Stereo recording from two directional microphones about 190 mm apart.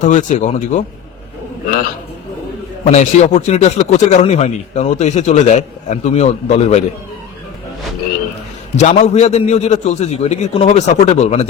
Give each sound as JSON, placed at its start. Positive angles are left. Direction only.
{"t": 0.0, "sound": "a man's voice", "side_deg": 40}
{"t": 2.8, "sound": "a man's voice", "side_deg": 40}
{"t": 8.7, "sound": "a man's voice", "side_deg": 35}